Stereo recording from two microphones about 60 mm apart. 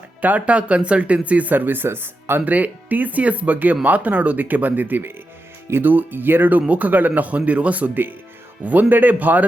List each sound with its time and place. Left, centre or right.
0.2 s speech: right
2.4 s speech: right